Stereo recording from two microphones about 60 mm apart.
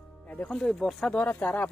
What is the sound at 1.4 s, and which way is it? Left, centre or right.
Speech, left.